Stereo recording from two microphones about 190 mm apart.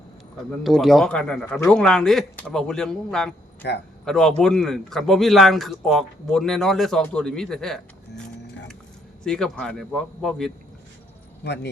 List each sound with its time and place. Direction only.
0.6 s a man's voice: centre (ahead or behind)
3.6 s speech: 60° left (ahead or behind)
4.0 s a man's voice: centre (ahead or behind)
9.2 s a man's voice: 5° left (ahead or behind)
11.4 s speech: 65° left (ahead or behind)